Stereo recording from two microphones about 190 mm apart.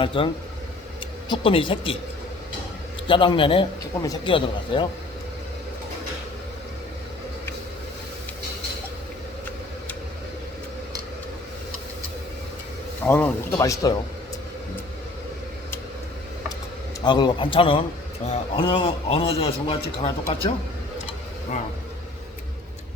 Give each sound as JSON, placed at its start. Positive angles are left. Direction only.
{"t": 0.0, "sound": "a man's voice", "side_deg": 25}
{"t": 1.3, "sound": "a man's voice", "side_deg": 25}
{"t": 3.1, "sound": "a man's voice", "side_deg": 25}
{"t": 13.1, "sound": "speech", "side_deg": 10}
{"t": 17.0, "sound": "a man's voice", "side_deg": 25}